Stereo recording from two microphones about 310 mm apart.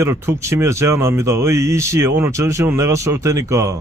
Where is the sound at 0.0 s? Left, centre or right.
Centre.